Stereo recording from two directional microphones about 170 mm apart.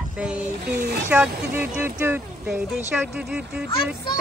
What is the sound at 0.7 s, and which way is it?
Speech, 70° right (ahead or behind).